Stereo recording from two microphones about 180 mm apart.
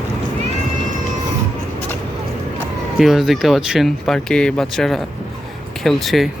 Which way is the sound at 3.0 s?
Centre (ahead or behind).